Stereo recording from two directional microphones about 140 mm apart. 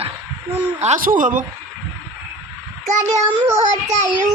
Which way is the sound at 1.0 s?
80° right.